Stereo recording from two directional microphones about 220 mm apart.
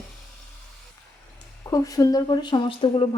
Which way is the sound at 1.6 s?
15° left (ahead or behind).